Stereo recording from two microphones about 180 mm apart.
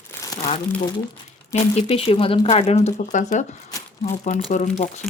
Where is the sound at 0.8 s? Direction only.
25° left (ahead or behind).